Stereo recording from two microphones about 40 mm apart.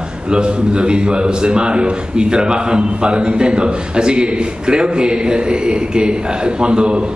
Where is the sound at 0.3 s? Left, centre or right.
Right.